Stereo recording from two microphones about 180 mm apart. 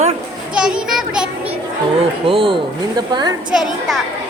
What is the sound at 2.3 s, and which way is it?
Speech, 30° right (ahead or behind).